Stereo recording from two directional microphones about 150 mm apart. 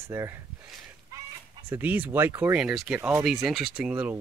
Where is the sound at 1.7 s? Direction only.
10° right (ahead or behind).